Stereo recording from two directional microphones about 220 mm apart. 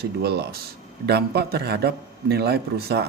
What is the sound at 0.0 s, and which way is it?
A man's voice, 45° right (ahead or behind).